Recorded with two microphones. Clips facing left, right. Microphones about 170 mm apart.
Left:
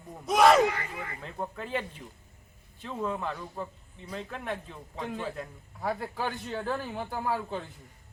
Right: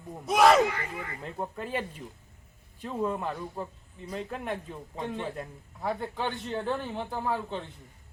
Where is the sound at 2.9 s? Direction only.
5° right (ahead or behind).